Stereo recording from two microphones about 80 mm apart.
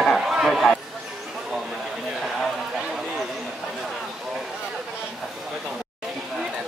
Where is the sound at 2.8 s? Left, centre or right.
Centre.